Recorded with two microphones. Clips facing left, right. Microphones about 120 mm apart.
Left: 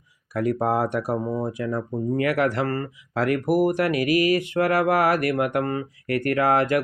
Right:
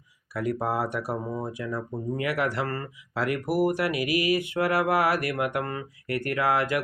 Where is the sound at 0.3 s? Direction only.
45° left (ahead or behind).